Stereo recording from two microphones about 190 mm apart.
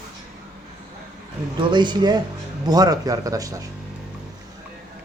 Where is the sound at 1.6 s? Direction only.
25° right (ahead or behind).